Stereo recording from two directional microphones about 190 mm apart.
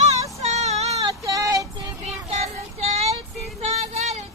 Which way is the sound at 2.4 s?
35° right (ahead or behind).